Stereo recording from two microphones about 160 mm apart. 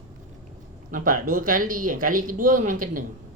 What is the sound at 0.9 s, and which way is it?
Speech, 60° right (ahead or behind).